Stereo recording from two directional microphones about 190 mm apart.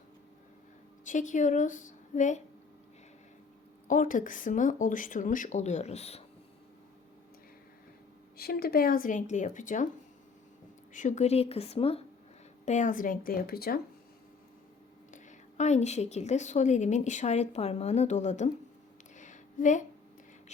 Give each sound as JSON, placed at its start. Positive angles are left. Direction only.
{"t": 1.0, "sound": "a woman's voice", "side_deg": 40}
{"t": 3.8, "sound": "speech", "side_deg": 45}
{"t": 8.4, "sound": "speech", "side_deg": 55}
{"t": 10.9, "sound": "a woman's voice", "side_deg": 40}
{"t": 15.1, "sound": "a woman's voice", "side_deg": 40}
{"t": 19.1, "sound": "a sound", "side_deg": 40}